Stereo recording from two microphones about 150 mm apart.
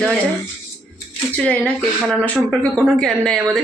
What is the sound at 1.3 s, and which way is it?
Speech, 5° left (ahead or behind).